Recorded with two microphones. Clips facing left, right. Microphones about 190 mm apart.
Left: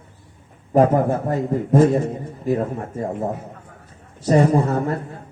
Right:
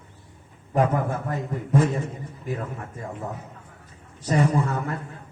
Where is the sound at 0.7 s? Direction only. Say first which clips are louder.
Left 7 dB; 40° left (ahead or behind).